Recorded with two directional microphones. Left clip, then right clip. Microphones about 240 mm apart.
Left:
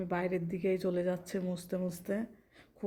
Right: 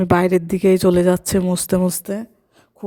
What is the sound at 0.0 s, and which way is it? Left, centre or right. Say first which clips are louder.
Speech: right 18 dB; right.